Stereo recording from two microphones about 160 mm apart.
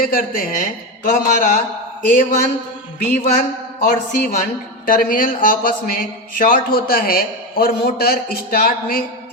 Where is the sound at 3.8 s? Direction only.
60° left (ahead or behind).